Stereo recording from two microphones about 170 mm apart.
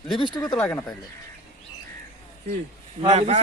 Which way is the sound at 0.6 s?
15° left (ahead or behind).